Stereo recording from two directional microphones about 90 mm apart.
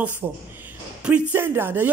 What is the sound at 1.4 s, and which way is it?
Speech, 25° right (ahead or behind).